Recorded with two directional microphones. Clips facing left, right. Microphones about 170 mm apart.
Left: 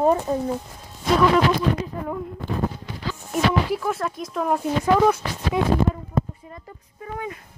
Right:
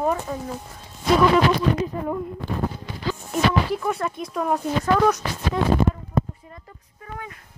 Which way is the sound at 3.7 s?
Centre (ahead or behind).